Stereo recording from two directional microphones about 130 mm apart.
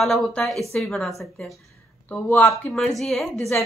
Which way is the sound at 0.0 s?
5° left (ahead or behind).